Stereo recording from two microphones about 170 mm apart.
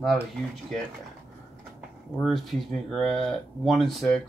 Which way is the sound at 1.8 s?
Centre (ahead or behind).